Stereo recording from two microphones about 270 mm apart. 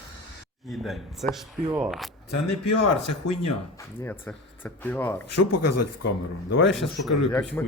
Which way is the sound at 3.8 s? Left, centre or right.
Centre.